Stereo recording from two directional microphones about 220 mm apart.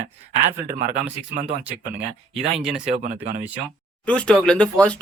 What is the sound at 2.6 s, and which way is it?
Speech, centre (ahead or behind).